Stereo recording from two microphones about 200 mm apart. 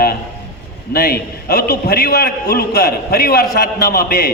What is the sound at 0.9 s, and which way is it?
A man's voice, 50° left (ahead or behind).